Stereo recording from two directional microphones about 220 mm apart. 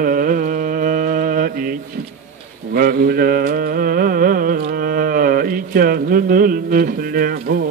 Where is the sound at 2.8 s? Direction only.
45° right (ahead or behind).